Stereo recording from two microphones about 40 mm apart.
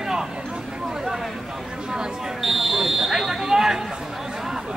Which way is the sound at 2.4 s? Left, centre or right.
Centre.